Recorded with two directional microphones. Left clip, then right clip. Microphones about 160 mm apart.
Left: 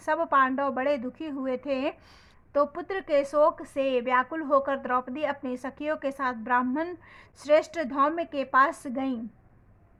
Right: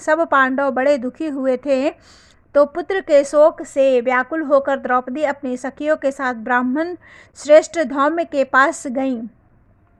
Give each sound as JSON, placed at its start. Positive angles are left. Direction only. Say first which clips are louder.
{"t": 0.0, "sound": "a woman's voice", "louder": "right 8 dB", "side_deg": -30}